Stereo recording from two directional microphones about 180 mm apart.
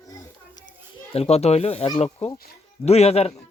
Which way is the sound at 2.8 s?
35° left (ahead or behind).